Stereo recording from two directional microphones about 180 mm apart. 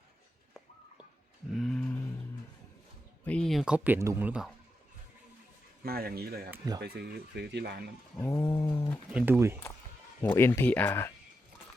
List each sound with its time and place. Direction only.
1.5 s a sound: centre (ahead or behind)
3.2 s speech: 5° left (ahead or behind)
5.8 s speech: 60° right (ahead or behind)
8.2 s a sound: 15° left (ahead or behind)
9.1 s speech: 10° right (ahead or behind)
10.2 s speech: 10° left (ahead or behind)